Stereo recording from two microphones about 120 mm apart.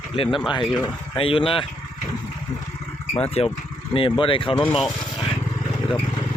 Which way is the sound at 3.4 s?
60° left (ahead or behind).